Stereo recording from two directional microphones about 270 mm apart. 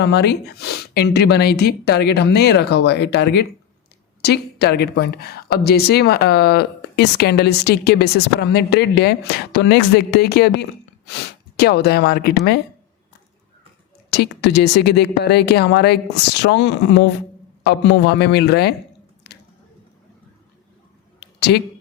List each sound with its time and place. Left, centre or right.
0.0 s a woman's voice: left
14.1 s a woman's voice: left
19.3 s squish: left
21.2 s a sound: left